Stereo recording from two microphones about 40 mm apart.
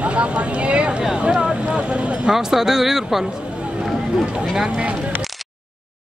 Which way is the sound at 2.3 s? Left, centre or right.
Centre.